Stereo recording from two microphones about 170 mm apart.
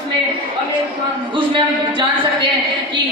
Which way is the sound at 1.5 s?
30° right (ahead or behind).